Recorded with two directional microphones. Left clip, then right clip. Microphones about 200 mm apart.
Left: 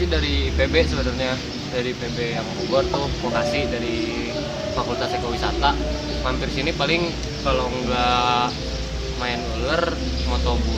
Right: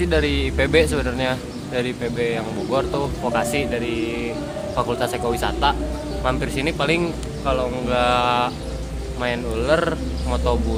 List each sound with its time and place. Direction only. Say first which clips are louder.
0.1 s a man's voice: right 3 dB; 50° right (ahead or behind)
3.3 s a man's voice: even; 55° right (ahead or behind)
4.9 s a man's voice: right 2 dB; 55° right (ahead or behind)